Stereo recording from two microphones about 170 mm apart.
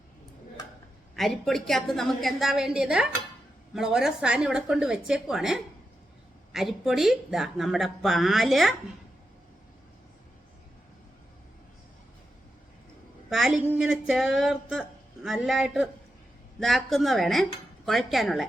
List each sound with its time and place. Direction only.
1.1 s speech: centre (ahead or behind)
13.3 s speech: centre (ahead or behind)